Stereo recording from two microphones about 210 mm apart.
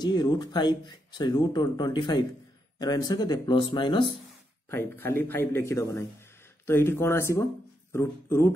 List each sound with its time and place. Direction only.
0.0 s speech: 20° left (ahead or behind)
4.6 s a man's voice: 10° left (ahead or behind)